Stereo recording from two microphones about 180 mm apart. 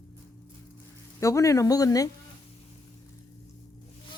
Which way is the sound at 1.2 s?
15° left (ahead or behind).